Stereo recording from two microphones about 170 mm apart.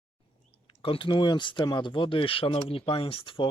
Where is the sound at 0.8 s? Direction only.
30° left (ahead or behind).